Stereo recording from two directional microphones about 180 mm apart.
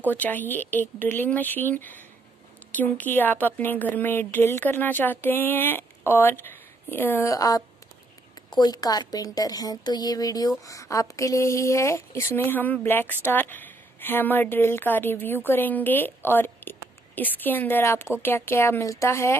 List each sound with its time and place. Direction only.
0.1 s a woman's voice: 10° left (ahead or behind)